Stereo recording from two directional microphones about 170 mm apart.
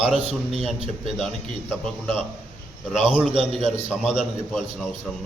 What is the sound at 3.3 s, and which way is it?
Speech, 30° right (ahead or behind).